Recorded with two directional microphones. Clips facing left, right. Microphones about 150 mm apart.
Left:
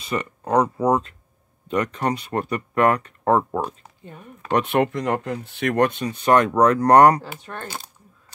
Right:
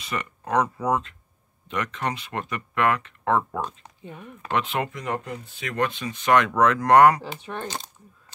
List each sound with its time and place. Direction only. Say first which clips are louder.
0.0 s speech: left 5 dB; 30° left (ahead or behind)
4.6 s speech: left 7 dB; 55° left (ahead or behind)
6.0 s speech: left 3 dB; 35° left (ahead or behind)
7.6 s speech: right 1 dB; 10° left (ahead or behind)